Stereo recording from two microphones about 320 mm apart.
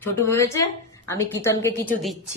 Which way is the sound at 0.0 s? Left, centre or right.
Centre.